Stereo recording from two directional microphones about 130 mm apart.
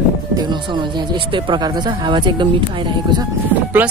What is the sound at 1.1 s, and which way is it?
Speech, 35° right (ahead or behind).